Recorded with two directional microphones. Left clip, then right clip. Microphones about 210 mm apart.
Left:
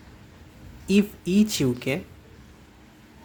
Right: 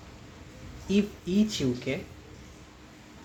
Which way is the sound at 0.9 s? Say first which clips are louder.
Left 5 dB; 45° left (ahead or behind).